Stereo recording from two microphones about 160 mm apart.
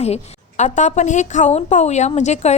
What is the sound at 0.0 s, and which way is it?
A woman's voice, 40° left (ahead or behind).